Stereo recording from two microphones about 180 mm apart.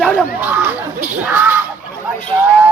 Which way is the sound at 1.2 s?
10° right (ahead or behind).